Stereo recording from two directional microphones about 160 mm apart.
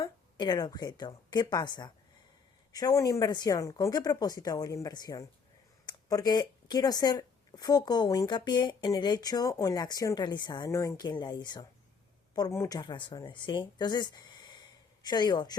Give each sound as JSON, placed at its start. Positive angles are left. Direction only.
{"t": 0.0, "sound": "a woman's voice", "side_deg": 25}